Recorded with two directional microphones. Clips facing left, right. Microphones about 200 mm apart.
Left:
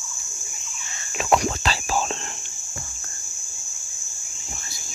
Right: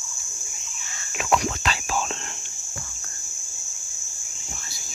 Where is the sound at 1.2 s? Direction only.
35° left (ahead or behind).